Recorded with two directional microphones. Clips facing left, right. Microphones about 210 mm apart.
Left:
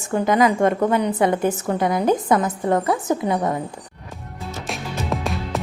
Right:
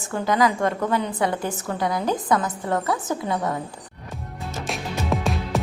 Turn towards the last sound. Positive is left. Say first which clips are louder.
# right 1 dB
turn(degrees=0)  # may be behind; listen again after turning